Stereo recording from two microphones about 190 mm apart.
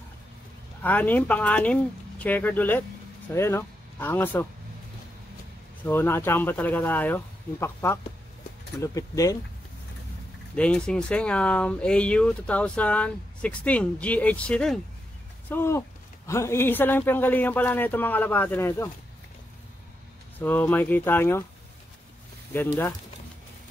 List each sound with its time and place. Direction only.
0.8 s a man's voice: 10° left (ahead or behind)
5.9 s a man's voice: 10° left (ahead or behind)
10.5 s a man's voice: 5° left (ahead or behind)
20.3 s a man's voice: 10° left (ahead or behind)
22.5 s a man's voice: 10° left (ahead or behind)